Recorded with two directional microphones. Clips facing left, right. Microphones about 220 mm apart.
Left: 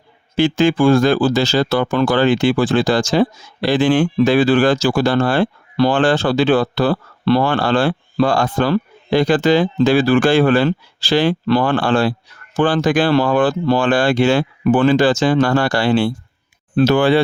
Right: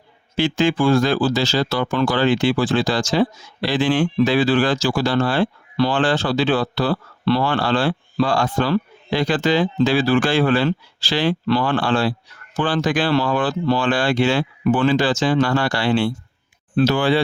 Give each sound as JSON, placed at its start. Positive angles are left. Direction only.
{"t": 0.3, "sound": "speech", "side_deg": 45}
{"t": 16.7, "sound": "speech", "side_deg": 55}